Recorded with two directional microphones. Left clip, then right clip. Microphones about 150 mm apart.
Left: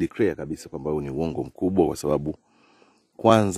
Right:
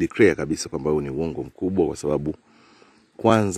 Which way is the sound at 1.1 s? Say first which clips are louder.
Even; 20° left (ahead or behind).